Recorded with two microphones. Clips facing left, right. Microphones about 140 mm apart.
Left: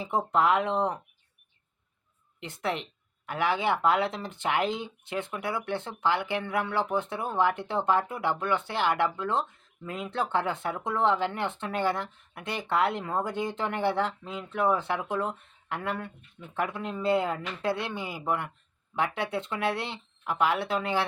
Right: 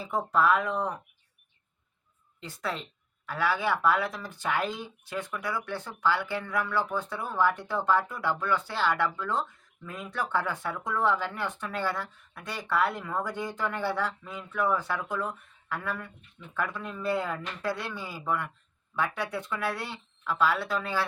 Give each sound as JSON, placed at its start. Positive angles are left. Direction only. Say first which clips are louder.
{"t": 0.0, "sound": "speech", "louder": "left 1 dB", "side_deg": 25}
{"t": 2.4, "sound": "speech", "louder": "left 3 dB", "side_deg": 20}